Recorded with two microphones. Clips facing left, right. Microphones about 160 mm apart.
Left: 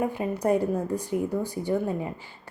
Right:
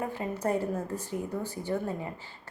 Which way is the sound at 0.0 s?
15° left (ahead or behind).